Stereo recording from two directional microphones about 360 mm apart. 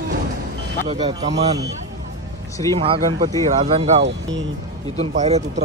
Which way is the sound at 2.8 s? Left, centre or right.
Centre.